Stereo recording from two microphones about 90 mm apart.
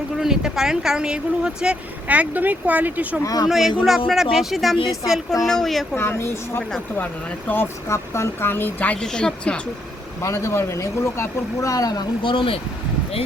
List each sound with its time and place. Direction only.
0.2 s speech: 5° right (ahead or behind)
3.2 s speech: 45° left (ahead or behind)
3.8 s speech: 5° right (ahead or behind)
6.0 s speech: 30° left (ahead or behind)
6.6 s speech: 5° left (ahead or behind)
7.0 s speech: 20° left (ahead or behind)
10.2 s speech: 30° left (ahead or behind)
12.2 s speech: 70° left (ahead or behind)